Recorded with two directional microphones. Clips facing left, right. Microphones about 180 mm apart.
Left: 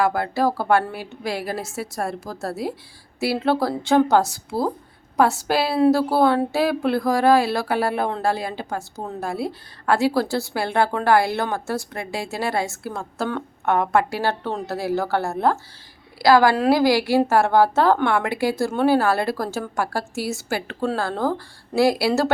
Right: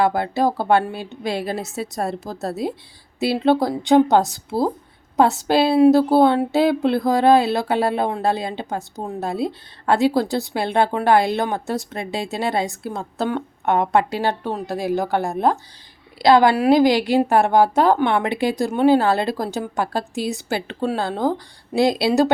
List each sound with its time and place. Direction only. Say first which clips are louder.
0.0 s a woman's voice: right 2 dB; 25° right (ahead or behind)